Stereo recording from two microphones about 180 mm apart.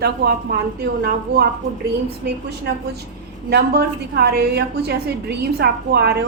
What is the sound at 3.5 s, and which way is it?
A woman's voice, 65° right (ahead or behind).